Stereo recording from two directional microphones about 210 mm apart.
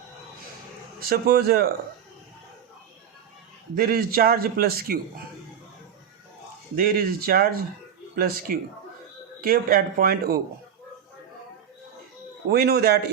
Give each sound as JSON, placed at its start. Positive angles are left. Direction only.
{"t": 1.1, "sound": "a man's voice", "side_deg": -50}
{"t": 3.8, "sound": "a man's voice", "side_deg": -45}
{"t": 6.7, "sound": "a man's voice", "side_deg": -45}
{"t": 12.5, "sound": "a man's voice", "side_deg": -50}